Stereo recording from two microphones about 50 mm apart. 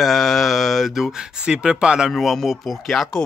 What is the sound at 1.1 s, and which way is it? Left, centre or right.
Speech, centre.